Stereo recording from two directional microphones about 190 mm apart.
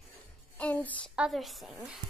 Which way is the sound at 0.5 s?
10° left (ahead or behind).